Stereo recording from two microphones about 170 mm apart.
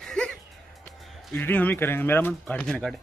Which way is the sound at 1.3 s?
10° left (ahead or behind).